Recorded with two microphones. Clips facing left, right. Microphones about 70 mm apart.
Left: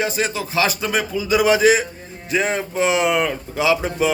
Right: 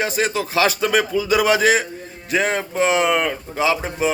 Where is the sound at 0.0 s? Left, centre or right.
Right.